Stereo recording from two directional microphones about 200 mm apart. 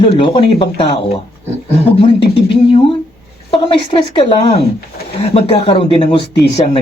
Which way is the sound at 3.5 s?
25° left (ahead or behind).